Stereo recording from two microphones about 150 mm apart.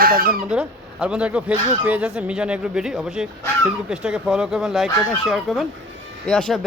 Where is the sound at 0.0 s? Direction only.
75° right (ahead or behind).